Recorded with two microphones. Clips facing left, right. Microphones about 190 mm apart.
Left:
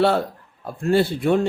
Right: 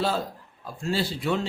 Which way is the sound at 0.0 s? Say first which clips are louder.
Left 8 dB; 65° left (ahead or behind).